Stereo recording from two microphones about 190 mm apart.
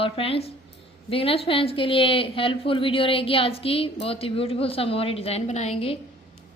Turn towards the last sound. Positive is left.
turn(degrees=30)  # may be behind; listen again after turning